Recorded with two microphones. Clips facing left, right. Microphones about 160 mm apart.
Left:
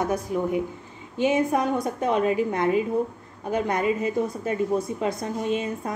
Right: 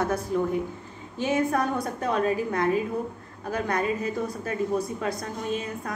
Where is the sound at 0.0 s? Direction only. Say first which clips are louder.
Even; 15° left (ahead or behind).